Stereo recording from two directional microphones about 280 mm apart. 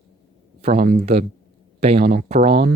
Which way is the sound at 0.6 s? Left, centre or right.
Right.